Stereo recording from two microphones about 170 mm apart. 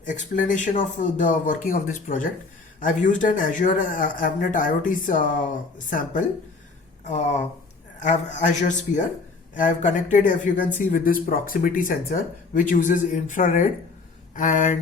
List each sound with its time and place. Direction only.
0.0 s speech: 50° left (ahead or behind)